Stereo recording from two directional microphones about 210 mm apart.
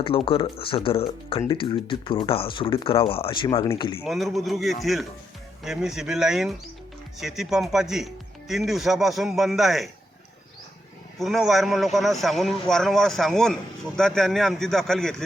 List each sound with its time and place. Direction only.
0.0 s speech: 25° left (ahead or behind)
4.0 s a man's voice: centre (ahead or behind)
11.2 s a man's voice: centre (ahead or behind)